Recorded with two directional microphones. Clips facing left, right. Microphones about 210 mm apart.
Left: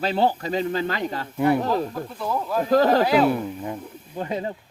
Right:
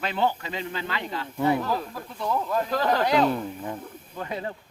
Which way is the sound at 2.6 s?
40° left (ahead or behind).